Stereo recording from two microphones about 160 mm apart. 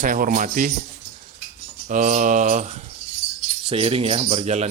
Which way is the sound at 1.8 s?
50° right (ahead or behind).